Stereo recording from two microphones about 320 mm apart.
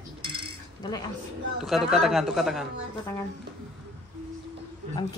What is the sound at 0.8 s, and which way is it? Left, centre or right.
Mantra, centre.